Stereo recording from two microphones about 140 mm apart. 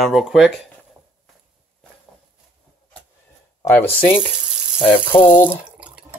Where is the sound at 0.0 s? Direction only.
Centre (ahead or behind).